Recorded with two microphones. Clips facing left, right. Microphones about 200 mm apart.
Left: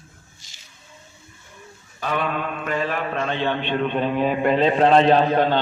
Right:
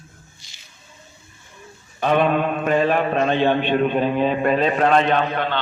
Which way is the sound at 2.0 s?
25° right (ahead or behind).